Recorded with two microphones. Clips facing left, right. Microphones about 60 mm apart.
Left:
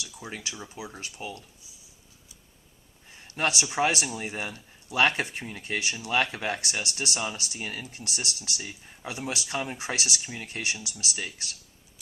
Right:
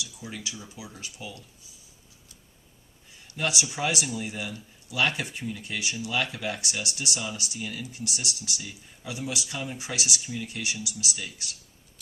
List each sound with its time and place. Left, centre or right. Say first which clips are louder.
0.0 s speech: even; left
3.2 s speech: left 2 dB; left